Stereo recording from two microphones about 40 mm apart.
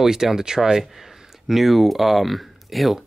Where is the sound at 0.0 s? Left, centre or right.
Centre.